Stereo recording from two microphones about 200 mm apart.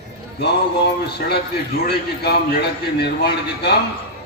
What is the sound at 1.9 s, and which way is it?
Speech, 55° left (ahead or behind).